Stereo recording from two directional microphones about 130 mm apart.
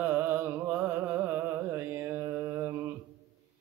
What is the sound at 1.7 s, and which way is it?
Carnatic music, 15° right (ahead or behind).